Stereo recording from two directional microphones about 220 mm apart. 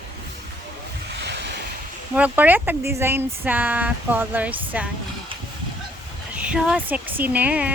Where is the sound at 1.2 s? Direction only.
50° right (ahead or behind).